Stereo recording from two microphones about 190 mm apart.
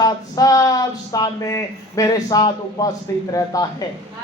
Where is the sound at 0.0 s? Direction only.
20° left (ahead or behind).